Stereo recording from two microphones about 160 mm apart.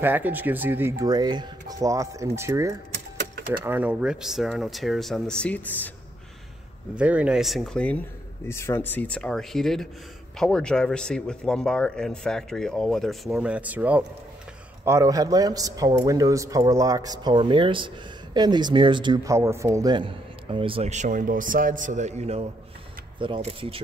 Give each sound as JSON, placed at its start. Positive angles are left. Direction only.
{"t": 0.0, "sound": "a man's voice", "side_deg": -10}
{"t": 7.0, "sound": "speech", "side_deg": -10}
{"t": 14.9, "sound": "a man's voice", "side_deg": -20}
{"t": 23.1, "sound": "speech", "side_deg": -30}